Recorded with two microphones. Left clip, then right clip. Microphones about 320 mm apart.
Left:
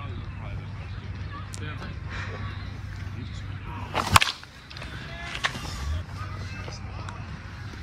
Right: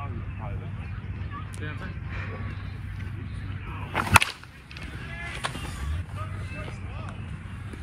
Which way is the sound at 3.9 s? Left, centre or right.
Centre.